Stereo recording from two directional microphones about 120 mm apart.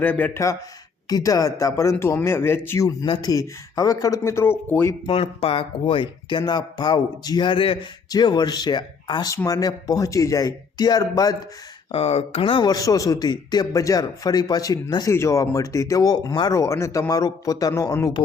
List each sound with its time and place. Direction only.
0.0 s speech: 15° left (ahead or behind)
1.1 s speech: 30° left (ahead or behind)
5.0 s speech: 50° left (ahead or behind)
9.3 s speech: 25° left (ahead or behind)
11.9 s speech: 60° left (ahead or behind)
12.7 s speech: 30° left (ahead or behind)
15.1 s speech: 25° left (ahead or behind)